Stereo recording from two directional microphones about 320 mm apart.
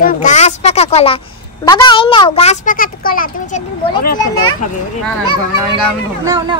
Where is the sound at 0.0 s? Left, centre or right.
Left.